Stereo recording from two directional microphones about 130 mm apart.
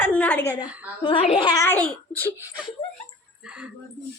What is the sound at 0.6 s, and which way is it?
Speech, 10° right (ahead or behind).